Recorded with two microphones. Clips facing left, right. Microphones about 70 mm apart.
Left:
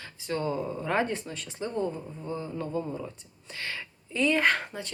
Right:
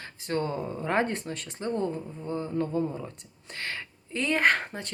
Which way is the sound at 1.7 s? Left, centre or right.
Left.